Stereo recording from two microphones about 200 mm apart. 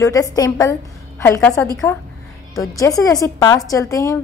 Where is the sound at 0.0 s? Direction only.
15° left (ahead or behind).